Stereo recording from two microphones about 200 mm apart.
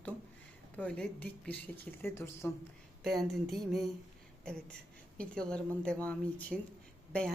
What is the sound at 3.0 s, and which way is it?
Speech, centre (ahead or behind).